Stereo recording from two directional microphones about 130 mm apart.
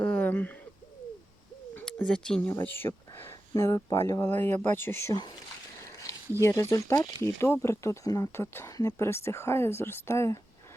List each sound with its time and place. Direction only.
0.0 s a sound: 10° left (ahead or behind)
1.8 s speech: 5° left (ahead or behind)
6.4 s speech: 25° left (ahead or behind)